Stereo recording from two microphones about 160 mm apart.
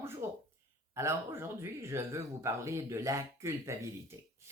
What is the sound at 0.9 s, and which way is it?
Speech, 15° right (ahead or behind).